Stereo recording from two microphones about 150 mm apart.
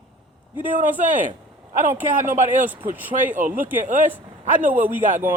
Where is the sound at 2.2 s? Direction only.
60° right (ahead or behind).